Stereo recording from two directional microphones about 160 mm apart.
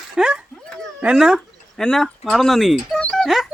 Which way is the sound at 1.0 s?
5° right (ahead or behind).